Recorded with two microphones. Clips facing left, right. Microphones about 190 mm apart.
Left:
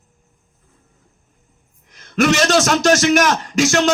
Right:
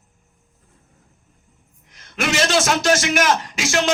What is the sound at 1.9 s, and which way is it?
A man's voice, 45° left (ahead or behind).